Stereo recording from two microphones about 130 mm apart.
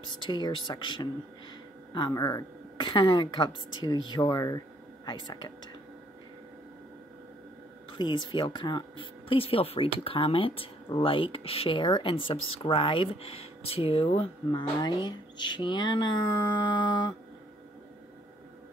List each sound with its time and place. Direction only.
0.2 s speech: 35° left (ahead or behind)
8.0 s speech: 35° left (ahead or behind)